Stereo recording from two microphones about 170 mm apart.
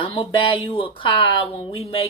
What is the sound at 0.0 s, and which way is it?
Speech, 30° left (ahead or behind).